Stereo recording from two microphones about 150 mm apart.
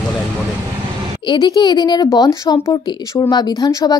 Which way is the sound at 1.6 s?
30° left (ahead or behind).